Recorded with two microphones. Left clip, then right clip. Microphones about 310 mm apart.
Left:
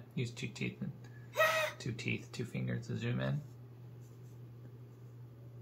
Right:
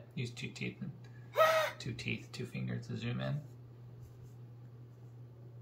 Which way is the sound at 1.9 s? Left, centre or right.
Centre.